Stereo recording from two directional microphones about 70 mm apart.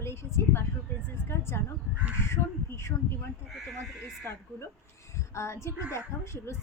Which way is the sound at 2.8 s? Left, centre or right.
Left.